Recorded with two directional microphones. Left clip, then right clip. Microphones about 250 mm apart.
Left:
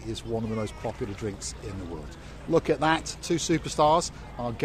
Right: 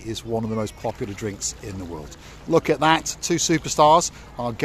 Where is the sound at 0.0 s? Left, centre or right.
Right.